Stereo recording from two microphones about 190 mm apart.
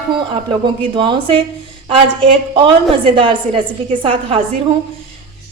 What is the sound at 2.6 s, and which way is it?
A woman's voice, 25° right (ahead or behind).